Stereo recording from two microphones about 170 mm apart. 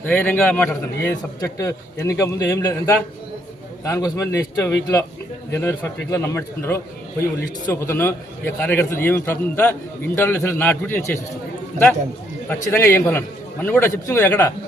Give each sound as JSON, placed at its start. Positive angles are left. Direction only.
{"t": 0.0, "sound": "a man's voice", "side_deg": 10}
{"t": 12.5, "sound": "a man's voice", "side_deg": 15}